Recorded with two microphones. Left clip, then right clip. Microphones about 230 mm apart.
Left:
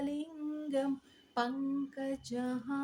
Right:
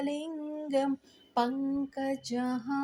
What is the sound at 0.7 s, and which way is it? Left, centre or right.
Female singing, right.